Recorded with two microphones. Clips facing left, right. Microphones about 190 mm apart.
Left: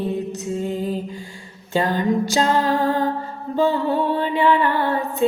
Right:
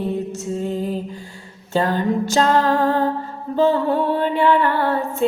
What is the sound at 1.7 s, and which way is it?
Music, 15° left (ahead or behind).